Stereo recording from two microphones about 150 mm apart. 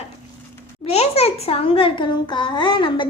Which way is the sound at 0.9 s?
45° left (ahead or behind).